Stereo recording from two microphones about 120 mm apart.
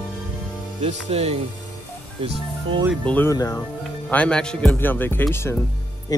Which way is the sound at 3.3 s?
30° left (ahead or behind).